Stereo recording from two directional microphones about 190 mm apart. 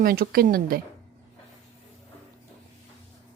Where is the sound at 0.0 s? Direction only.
50° right (ahead or behind).